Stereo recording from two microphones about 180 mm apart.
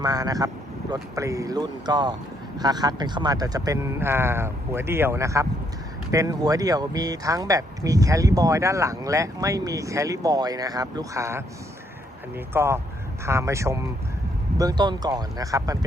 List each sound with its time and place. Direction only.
0.0 s speech: 20° right (ahead or behind)
12.5 s speech: 15° right (ahead or behind)